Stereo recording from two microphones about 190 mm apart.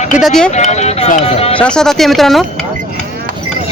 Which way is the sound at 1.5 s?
5° left (ahead or behind).